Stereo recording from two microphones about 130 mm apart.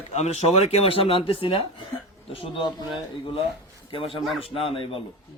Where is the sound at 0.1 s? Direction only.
55° left (ahead or behind).